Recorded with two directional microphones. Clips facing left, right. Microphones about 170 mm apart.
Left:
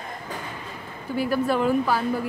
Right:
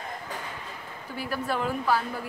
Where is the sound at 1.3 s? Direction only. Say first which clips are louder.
Left 7 dB; 5° left (ahead or behind).